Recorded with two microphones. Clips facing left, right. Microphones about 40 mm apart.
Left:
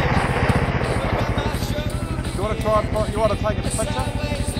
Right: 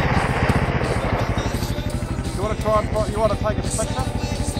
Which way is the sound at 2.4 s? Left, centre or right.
Centre.